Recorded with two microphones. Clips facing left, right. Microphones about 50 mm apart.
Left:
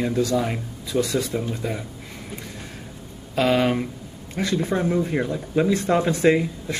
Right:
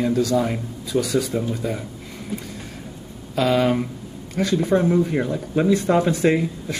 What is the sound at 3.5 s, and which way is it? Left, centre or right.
Speech, centre.